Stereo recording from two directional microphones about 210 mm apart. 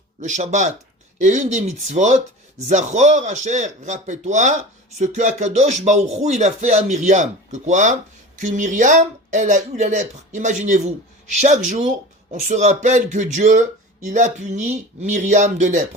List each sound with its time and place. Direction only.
0.2 s speech: 35° right (ahead or behind)